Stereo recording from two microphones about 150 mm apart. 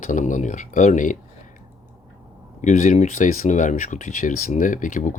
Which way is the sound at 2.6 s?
55° left (ahead or behind).